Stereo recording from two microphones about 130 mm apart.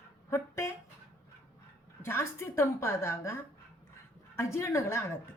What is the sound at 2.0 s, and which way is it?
Speech, 20° left (ahead or behind).